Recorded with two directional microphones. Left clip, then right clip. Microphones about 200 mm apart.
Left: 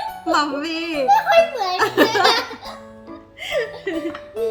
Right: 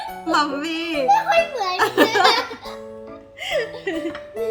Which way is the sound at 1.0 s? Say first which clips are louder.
Left 3 dB; 15° left (ahead or behind).